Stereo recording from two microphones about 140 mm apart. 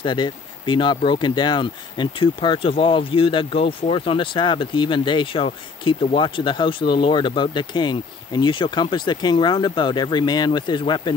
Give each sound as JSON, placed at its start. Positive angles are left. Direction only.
{"t": 0.0, "sound": "speech", "side_deg": 35}